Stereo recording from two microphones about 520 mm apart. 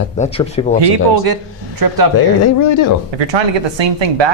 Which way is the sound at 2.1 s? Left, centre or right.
Left.